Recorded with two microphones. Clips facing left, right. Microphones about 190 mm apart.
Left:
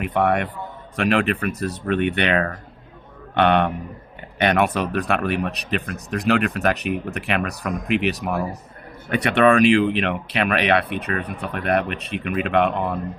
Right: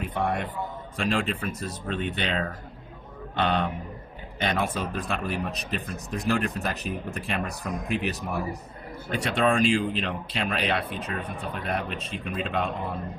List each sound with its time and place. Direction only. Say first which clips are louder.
0.0 s a man's voice: left 7 dB; 65° left (ahead or behind)